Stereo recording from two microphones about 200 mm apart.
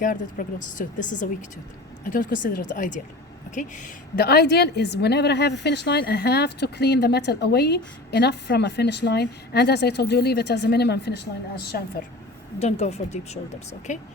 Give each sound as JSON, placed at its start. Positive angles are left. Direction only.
{"t": 0.0, "sound": "a woman's voice", "side_deg": 40}
{"t": 12.5, "sound": "speech", "side_deg": 35}